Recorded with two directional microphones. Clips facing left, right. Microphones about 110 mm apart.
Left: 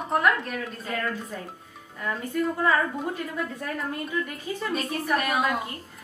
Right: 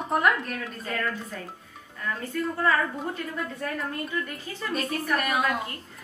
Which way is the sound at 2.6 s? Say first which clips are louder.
Right 2 dB; centre (ahead or behind).